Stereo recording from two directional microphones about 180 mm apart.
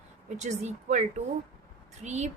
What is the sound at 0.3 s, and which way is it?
A woman's voice, 40° right (ahead or behind).